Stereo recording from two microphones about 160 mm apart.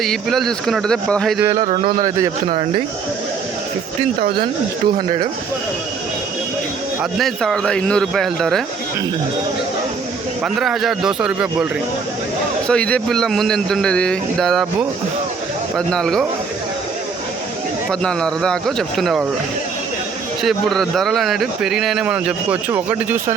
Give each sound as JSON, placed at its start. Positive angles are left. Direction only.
{"t": 0.0, "sound": "a man's voice", "side_deg": 0}
{"t": 2.0, "sound": "a man's voice", "side_deg": -20}
{"t": 2.5, "sound": "speech", "side_deg": -60}
{"t": 4.2, "sound": "speech", "side_deg": -75}
{"t": 7.0, "sound": "a man's voice", "side_deg": 0}
{"t": 10.4, "sound": "a man's voice", "side_deg": -5}
{"t": 12.6, "sound": "a man's voice", "side_deg": 5}
{"t": 18.0, "sound": "a man's voice", "side_deg": 5}
{"t": 20.4, "sound": "a man's voice", "side_deg": 0}